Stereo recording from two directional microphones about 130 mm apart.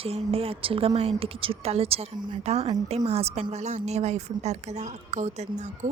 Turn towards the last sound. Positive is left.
turn(degrees=-60)  # may be behind; listen again after turning